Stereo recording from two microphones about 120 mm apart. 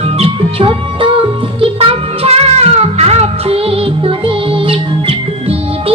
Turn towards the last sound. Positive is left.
turn(degrees=-50)  # may be behind; listen again after turning